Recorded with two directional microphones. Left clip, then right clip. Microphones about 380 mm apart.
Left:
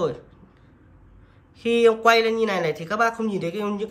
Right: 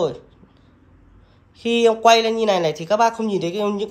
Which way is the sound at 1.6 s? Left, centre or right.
Centre.